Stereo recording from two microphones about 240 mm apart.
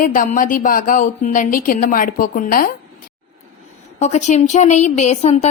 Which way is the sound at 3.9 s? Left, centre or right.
Left.